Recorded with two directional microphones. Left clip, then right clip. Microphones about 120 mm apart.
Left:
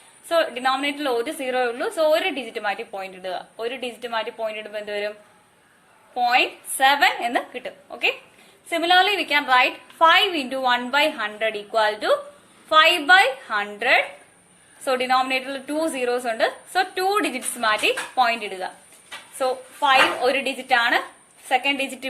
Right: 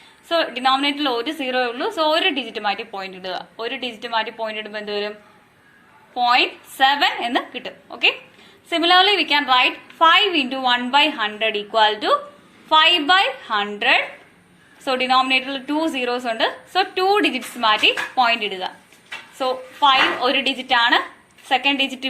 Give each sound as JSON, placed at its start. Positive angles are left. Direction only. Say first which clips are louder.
{"t": 0.3, "sound": "a woman's voice", "louder": "right 2 dB", "side_deg": 45}
{"t": 6.1, "sound": "a woman's voice", "louder": "right 2 dB", "side_deg": 45}